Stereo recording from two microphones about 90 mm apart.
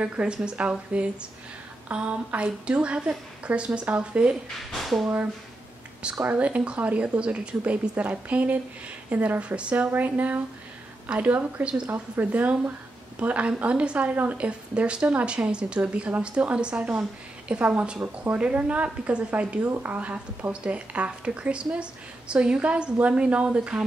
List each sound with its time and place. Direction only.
0.0 s a woman's voice: 10° right (ahead or behind)
4.7 s speech: centre (ahead or behind)
6.2 s a woman's voice: 15° right (ahead or behind)